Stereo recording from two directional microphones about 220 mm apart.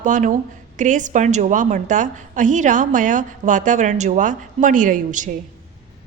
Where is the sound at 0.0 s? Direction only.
35° right (ahead or behind).